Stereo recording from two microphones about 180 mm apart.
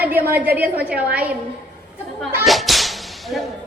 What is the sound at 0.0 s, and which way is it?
A woman's voice, 10° right (ahead or behind).